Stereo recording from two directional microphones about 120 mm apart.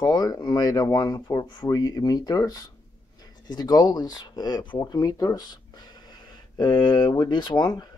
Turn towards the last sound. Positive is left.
turn(degrees=35)  # may be behind; listen again after turning